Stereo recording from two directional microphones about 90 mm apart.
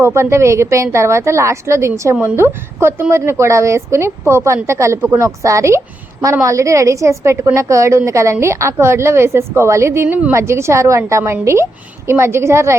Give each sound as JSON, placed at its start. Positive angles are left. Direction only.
{"t": 0.0, "sound": "a woman's voice", "side_deg": -30}